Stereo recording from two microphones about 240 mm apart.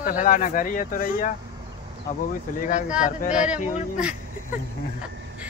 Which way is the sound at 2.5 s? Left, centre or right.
Left.